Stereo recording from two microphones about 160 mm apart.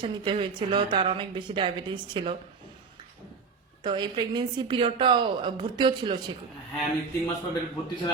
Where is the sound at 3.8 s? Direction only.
30° right (ahead or behind).